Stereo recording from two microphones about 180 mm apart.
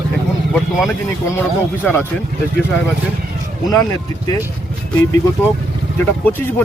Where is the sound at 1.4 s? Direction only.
10° left (ahead or behind).